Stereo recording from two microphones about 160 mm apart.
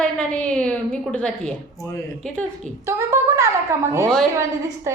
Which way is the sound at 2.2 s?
5° left (ahead or behind).